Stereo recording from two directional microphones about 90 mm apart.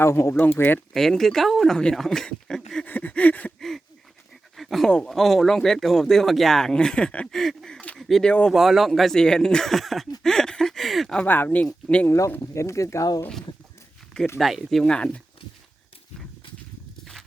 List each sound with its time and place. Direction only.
0.0 s speech: 30° left (ahead or behind)
0.9 s speech: 5° left (ahead or behind)
2.8 s a sound: 20° left (ahead or behind)
4.5 s dog: centre (ahead or behind)
4.9 s speech: 5° left (ahead or behind)
8.3 s a sound: 10° left (ahead or behind)
8.5 s speech: 5° right (ahead or behind)
10.2 s a sound: 5° left (ahead or behind)
11.3 s speech: 20° left (ahead or behind)
12.0 s speech: 35° left (ahead or behind)
14.3 s speech: centre (ahead or behind)